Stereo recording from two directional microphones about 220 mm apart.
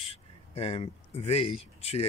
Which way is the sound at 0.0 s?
25° left (ahead or behind).